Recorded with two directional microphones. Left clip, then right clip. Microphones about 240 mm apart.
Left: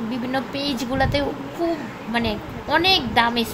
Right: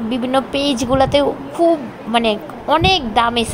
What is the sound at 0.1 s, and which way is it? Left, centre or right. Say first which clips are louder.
A woman's voice: right 9 dB; right.